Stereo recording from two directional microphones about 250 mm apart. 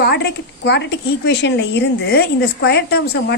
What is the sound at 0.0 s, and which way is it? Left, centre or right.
A woman's voice, left.